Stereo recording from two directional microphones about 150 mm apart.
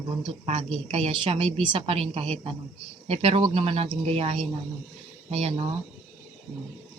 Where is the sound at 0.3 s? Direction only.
40° right (ahead or behind).